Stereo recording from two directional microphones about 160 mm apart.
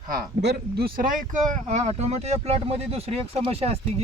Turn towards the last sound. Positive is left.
turn(degrees=-40)  # may be behind; listen again after turning